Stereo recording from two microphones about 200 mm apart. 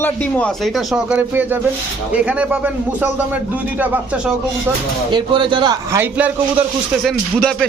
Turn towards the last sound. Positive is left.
turn(degrees=5)  # may be behind; listen again after turning